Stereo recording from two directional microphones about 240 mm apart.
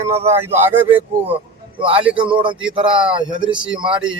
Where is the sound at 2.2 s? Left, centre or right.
Right.